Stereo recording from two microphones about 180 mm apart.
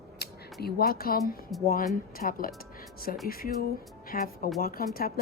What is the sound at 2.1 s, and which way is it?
A woman's voice, 50° left (ahead or behind).